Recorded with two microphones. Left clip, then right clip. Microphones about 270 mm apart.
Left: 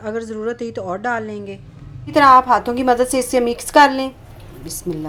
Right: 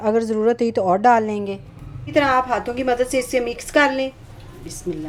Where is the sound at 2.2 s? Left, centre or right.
Centre.